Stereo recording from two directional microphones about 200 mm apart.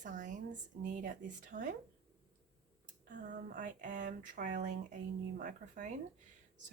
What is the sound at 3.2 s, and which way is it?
Speech, 40° right (ahead or behind).